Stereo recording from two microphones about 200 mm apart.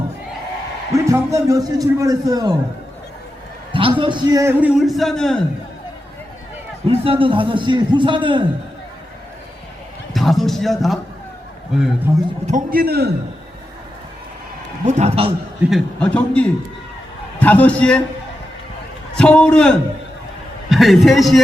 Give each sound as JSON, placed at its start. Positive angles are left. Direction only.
{"t": 0.9, "sound": "a man's voice", "side_deg": -15}
{"t": 3.7, "sound": "a man's voice", "side_deg": -25}
{"t": 6.8, "sound": "a man's voice", "side_deg": -30}
{"t": 10.2, "sound": "a man's voice", "side_deg": 0}
{"t": 12.1, "sound": "a man's voice", "side_deg": -15}
{"t": 12.5, "sound": "a man's voice", "side_deg": -45}
{"t": 14.8, "sound": "a man's voice", "side_deg": -35}
{"t": 15.7, "sound": "a man's voice", "side_deg": 5}
{"t": 19.1, "sound": "a man's voice", "side_deg": 5}